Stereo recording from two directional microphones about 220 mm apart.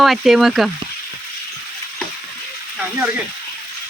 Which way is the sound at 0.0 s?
Centre (ahead or behind).